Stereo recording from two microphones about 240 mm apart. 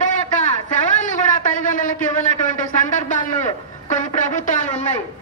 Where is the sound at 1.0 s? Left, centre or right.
Left.